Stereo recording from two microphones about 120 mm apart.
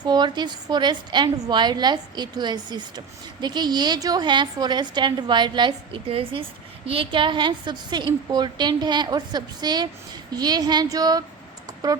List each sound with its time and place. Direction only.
0.0 s a woman's voice: 35° right (ahead or behind)